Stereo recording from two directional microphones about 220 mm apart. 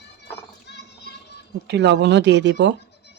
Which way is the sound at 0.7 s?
50° left (ahead or behind).